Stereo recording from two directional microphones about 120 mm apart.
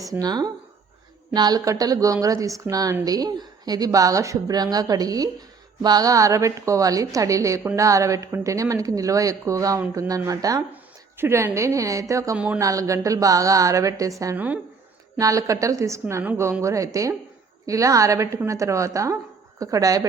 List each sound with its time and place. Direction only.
0.0 s a woman's voice: 30° right (ahead or behind)
14.3 s speech: 15° right (ahead or behind)
15.2 s a woman's voice: 30° right (ahead or behind)